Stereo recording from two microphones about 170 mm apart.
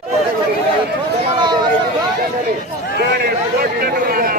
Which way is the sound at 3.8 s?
60° right (ahead or behind).